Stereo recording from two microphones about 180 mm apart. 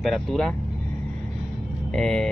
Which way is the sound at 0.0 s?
Centre (ahead or behind).